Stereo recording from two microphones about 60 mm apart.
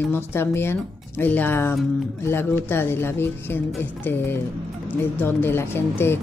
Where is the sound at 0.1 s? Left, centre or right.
Left.